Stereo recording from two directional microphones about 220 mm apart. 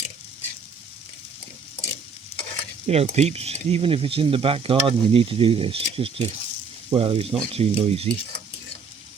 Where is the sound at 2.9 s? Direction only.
30° right (ahead or behind).